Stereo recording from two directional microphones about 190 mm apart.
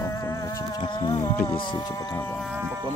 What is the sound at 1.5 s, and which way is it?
Music, 25° left (ahead or behind).